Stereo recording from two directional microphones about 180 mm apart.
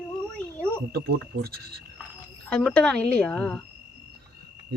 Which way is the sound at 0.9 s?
60° right (ahead or behind).